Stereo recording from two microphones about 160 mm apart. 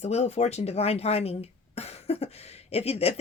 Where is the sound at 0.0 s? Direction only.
45° left (ahead or behind).